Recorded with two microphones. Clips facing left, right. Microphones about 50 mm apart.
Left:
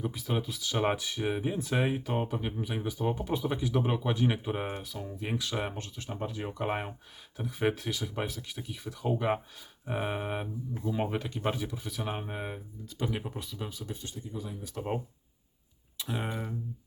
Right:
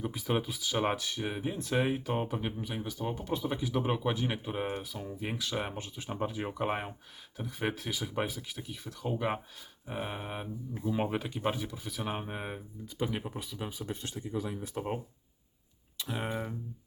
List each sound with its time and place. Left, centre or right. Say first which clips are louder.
0.0 s speech: right 1 dB; centre
0.6 s speech: left 1 dB; centre
4.8 s speech: even; centre
10.8 s speech: even; centre
14.0 s speech: right 4 dB; right
16.0 s speech: even; centre